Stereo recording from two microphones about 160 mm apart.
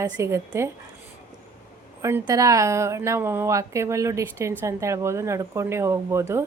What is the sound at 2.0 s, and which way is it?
A woman's voice, 20° right (ahead or behind).